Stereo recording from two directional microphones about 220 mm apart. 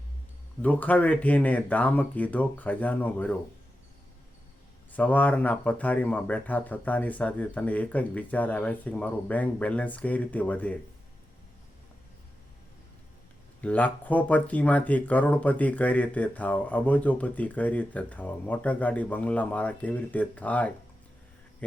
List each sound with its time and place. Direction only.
0.6 s speech: 5° left (ahead or behind)
4.9 s speech: 5° left (ahead or behind)
13.6 s speech: 5° left (ahead or behind)